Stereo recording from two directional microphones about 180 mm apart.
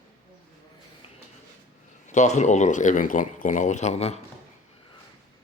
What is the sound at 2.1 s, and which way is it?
Speech, 40° left (ahead or behind).